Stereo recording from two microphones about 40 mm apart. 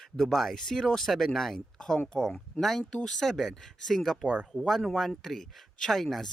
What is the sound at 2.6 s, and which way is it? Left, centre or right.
Speech, centre.